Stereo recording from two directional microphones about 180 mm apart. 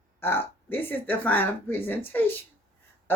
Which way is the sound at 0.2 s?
10° left (ahead or behind).